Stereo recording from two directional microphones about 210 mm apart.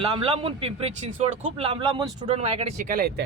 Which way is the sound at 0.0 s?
25° right (ahead or behind).